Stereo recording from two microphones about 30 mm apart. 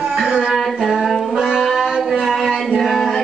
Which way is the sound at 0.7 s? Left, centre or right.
Right.